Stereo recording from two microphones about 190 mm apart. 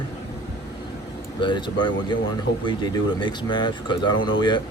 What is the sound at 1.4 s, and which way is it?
Speech, 25° left (ahead or behind).